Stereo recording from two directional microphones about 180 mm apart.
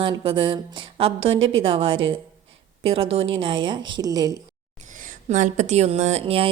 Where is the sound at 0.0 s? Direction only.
30° right (ahead or behind).